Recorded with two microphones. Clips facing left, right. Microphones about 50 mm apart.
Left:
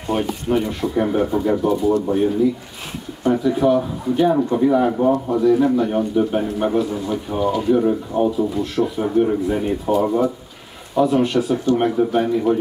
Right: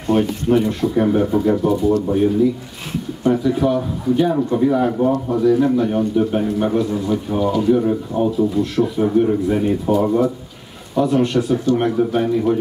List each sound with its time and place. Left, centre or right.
0.0 s a man's voice: centre